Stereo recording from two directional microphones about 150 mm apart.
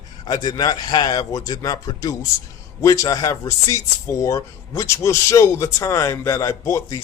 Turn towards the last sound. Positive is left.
turn(degrees=20)  # may be behind; listen again after turning